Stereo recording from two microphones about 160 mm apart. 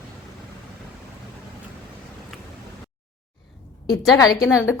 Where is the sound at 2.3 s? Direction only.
Centre (ahead or behind).